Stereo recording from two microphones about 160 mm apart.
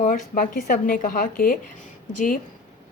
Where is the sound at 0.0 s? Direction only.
55° left (ahead or behind).